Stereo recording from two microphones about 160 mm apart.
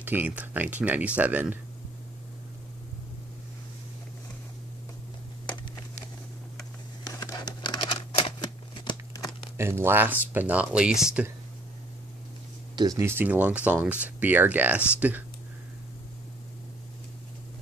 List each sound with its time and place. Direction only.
0.0 s speech: 10° right (ahead or behind)
7.1 s a sound: 25° left (ahead or behind)
9.6 s speech: 15° right (ahead or behind)
12.7 s speech: 20° right (ahead or behind)